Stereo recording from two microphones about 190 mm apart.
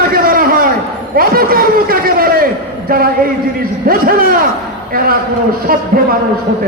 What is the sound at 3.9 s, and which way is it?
Speech, 50° right (ahead or behind).